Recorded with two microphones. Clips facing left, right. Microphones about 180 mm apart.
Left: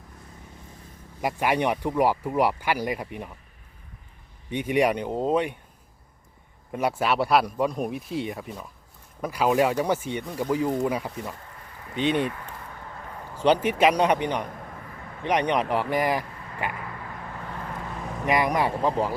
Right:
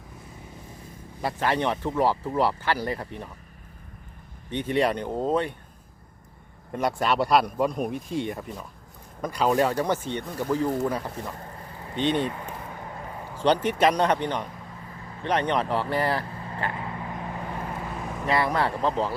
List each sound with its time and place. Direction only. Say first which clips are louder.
1.2 s speech: left 1 dB; 15° left (ahead or behind)
4.4 s speech: left 1 dB; 10° left (ahead or behind)
6.7 s speech: even; 5° left (ahead or behind)
11.1 s speech: even; 40° right (ahead or behind)
11.9 s speech: left 1 dB; 10° left (ahead or behind)
12.3 s a sound: right 3 dB; 20° right (ahead or behind)
13.4 s speech: left 1 dB; 10° left (ahead or behind)
16.7 s vehicle: right 4 dB; 25° right (ahead or behind)
18.3 s speech: left 1 dB; 15° left (ahead or behind)